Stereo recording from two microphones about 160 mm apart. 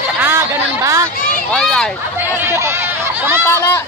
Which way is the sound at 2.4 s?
15° right (ahead or behind).